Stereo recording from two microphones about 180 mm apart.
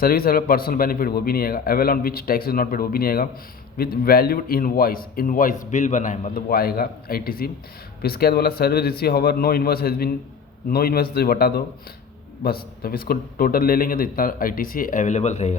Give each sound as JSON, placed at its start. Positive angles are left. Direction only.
{"t": 0.0, "sound": "a man's voice", "side_deg": 55}